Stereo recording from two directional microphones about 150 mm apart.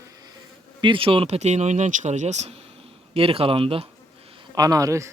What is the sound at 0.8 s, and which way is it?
Speech, 35° right (ahead or behind).